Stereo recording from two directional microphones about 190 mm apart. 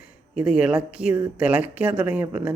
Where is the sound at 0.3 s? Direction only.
5° right (ahead or behind).